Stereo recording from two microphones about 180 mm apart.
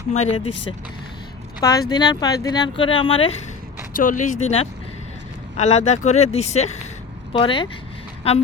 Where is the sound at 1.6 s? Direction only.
20° left (ahead or behind).